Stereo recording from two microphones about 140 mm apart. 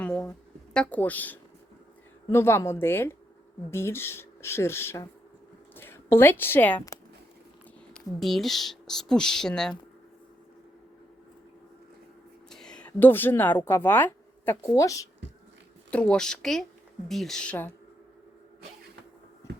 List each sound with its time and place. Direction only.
0.0 s a sound: 10° left (ahead or behind)
2.3 s a woman's voice: 20° left (ahead or behind)
7.9 s a woman's voice: centre (ahead or behind)
12.5 s a woman's voice: 5° left (ahead or behind); by 15.0 s 25° left (ahead or behind)
15.9 s a woman's voice: 10° left (ahead or behind)